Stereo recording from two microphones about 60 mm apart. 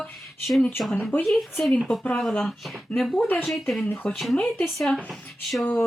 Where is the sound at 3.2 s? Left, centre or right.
Left.